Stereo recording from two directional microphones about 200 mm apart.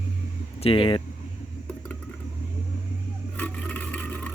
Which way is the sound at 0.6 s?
25° left (ahead or behind).